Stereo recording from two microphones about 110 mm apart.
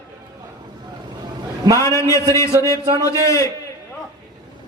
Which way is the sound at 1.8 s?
25° left (ahead or behind).